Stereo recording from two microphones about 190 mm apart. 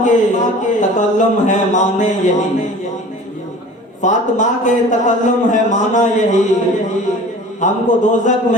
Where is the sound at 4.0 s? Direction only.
40° left (ahead or behind).